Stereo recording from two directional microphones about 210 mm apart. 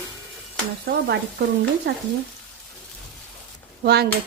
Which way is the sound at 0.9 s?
45° right (ahead or behind).